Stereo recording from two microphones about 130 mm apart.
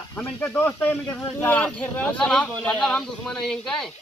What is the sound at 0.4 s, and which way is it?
Speech, 15° left (ahead or behind).